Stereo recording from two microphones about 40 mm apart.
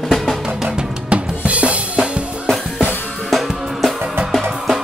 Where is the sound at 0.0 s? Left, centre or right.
Centre.